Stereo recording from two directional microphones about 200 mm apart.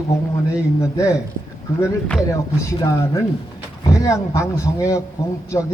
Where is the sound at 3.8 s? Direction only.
15° left (ahead or behind).